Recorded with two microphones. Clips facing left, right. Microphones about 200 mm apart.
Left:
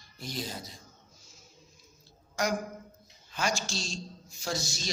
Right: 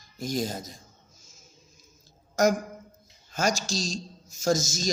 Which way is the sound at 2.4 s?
45° right (ahead or behind).